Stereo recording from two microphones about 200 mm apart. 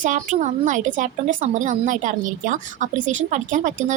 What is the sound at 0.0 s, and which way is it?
A woman's voice, 40° right (ahead or behind).